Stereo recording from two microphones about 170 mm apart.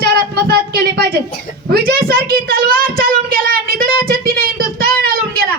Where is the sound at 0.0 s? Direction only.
65° right (ahead or behind).